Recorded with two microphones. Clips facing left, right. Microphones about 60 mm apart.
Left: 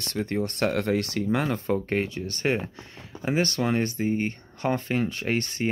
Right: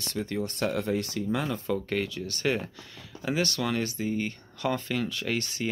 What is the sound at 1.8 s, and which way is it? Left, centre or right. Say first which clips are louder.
Speech: left 3 dB; left.